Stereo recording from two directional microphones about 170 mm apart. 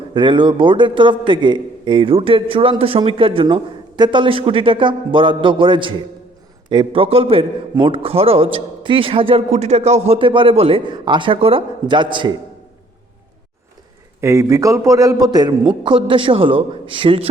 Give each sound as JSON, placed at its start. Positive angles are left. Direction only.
{"t": 0.1, "sound": "a man's voice", "side_deg": -30}
{"t": 14.2, "sound": "a man's voice", "side_deg": -15}